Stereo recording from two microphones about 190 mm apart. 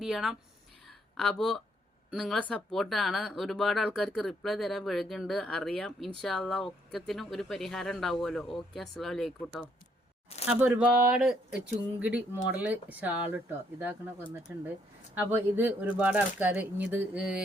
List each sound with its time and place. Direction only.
0.0 s speech: centre (ahead or behind)
0.9 s a sound: centre (ahead or behind)
2.1 s speech: centre (ahead or behind)
10.6 s speech: 5° right (ahead or behind)